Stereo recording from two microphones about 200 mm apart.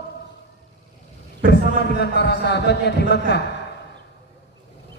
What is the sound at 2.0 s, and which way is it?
A man's voice, 55° left (ahead or behind).